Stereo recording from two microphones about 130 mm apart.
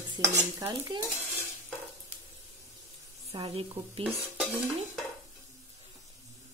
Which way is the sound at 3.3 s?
40° right (ahead or behind).